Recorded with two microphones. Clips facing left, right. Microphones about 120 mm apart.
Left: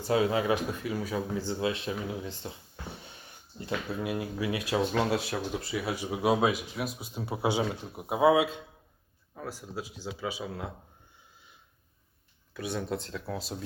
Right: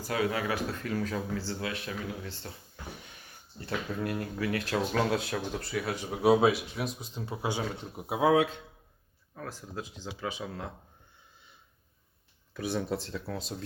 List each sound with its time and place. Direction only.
0.0 s speech: 25° left (ahead or behind)
3.8 s speech: 5° left (ahead or behind)
8.0 s speech: centre (ahead or behind)
12.5 s speech: centre (ahead or behind)